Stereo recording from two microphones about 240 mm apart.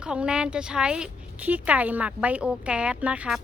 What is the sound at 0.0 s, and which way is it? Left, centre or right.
A woman's voice, centre.